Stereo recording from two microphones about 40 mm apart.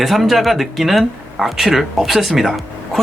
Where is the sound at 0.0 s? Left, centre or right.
Centre.